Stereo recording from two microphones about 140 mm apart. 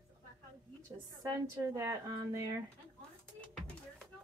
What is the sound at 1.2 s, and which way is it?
A woman's voice, 25° right (ahead or behind).